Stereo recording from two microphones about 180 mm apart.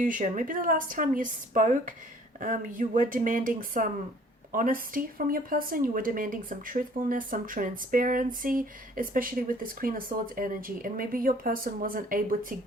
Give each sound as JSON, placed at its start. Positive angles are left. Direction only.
{"t": 0.0, "sound": "speech", "side_deg": -45}